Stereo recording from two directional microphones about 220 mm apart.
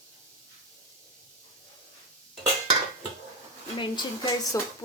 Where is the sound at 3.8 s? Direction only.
20° left (ahead or behind).